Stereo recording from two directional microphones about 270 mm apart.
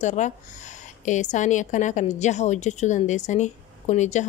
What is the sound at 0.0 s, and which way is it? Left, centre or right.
A woman's voice, left.